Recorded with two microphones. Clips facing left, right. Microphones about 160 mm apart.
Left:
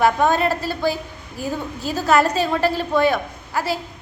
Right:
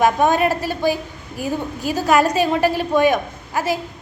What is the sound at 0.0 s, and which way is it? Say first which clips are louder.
A woman's voice: right 1 dB; 15° right (ahead or behind).